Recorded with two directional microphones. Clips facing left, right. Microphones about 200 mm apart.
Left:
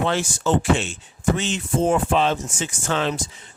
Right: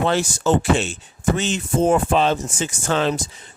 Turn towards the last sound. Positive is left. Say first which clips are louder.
# right 3 dB
turn(degrees=-40)  # may be behind; listen again after turning